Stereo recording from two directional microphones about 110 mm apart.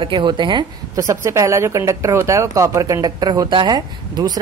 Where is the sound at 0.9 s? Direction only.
30° right (ahead or behind).